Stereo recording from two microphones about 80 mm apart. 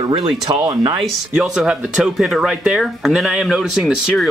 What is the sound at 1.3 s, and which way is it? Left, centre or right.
Speech, centre.